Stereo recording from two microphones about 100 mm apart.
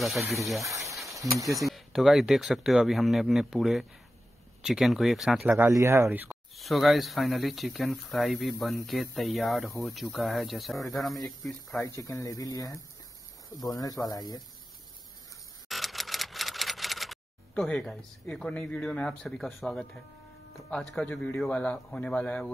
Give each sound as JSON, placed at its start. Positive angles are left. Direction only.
{"t": 0.0, "sound": "speech", "side_deg": 0}
{"t": 1.1, "sound": "a sound", "side_deg": 0}
{"t": 1.4, "sound": "speech", "side_deg": -35}
{"t": 1.7, "sound": "speech", "side_deg": 0}
{"t": 5.7, "sound": "speech", "side_deg": -30}
{"t": 6.5, "sound": "speech", "side_deg": 0}
{"t": 11.8, "sound": "speech", "side_deg": 35}
{"t": 15.7, "sound": "a sound", "side_deg": 0}
{"t": 17.6, "sound": "speech", "side_deg": 5}